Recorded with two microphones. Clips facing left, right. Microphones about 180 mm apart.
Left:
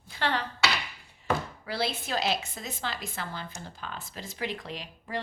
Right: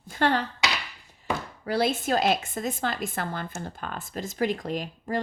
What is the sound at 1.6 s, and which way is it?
A woman's voice, 45° right (ahead or behind).